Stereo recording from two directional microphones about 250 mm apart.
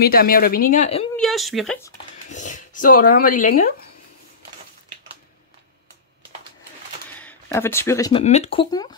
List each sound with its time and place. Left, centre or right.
0.0 s a woman's voice: left
1.1 s a woman's voice: centre
2.3 s speech: left
7.2 s speech: centre
8.2 s speech: left